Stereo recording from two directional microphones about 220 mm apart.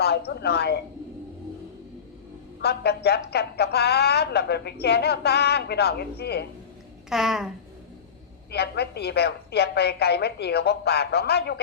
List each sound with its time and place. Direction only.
0.0 s a woman's voice: 45° left (ahead or behind)
2.6 s a woman's voice: 50° left (ahead or behind)
7.1 s babbling: centre (ahead or behind)
8.4 s a woman's voice: 50° left (ahead or behind)